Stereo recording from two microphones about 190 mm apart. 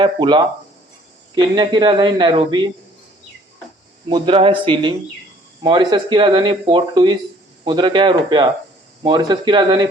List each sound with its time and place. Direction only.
0.0 s speech: 25° right (ahead or behind)
4.1 s speech: 30° right (ahead or behind)